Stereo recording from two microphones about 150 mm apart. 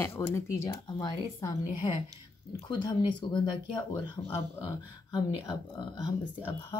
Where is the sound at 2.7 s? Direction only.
30° left (ahead or behind).